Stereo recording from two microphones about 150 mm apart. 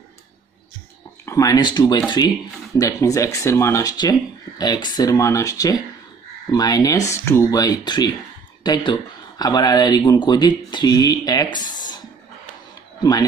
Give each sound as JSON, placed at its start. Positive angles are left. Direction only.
{"t": 1.2, "sound": "speech", "side_deg": 20}